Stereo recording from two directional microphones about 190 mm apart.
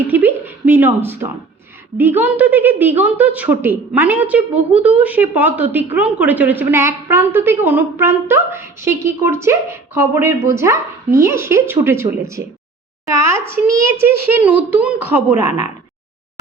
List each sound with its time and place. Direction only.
0.0 s a woman's voice: 10° right (ahead or behind)